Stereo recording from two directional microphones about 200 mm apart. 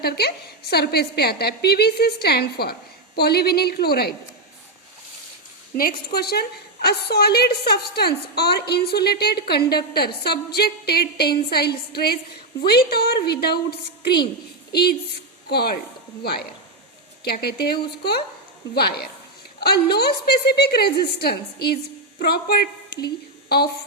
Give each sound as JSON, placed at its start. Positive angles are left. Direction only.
{"t": 0.0, "sound": "a woman's voice", "side_deg": 50}
{"t": 5.7, "sound": "a woman's voice", "side_deg": 45}